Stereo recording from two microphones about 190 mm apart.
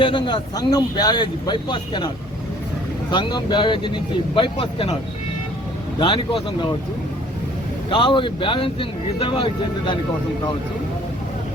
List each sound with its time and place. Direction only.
0.0 s speech: 25° left (ahead or behind)
3.1 s speech: 25° left (ahead or behind)
6.0 s speech: 25° left (ahead or behind)
7.9 s speech: 25° left (ahead or behind)